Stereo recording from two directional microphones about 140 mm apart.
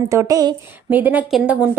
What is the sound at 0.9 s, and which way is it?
Speech, 10° right (ahead or behind).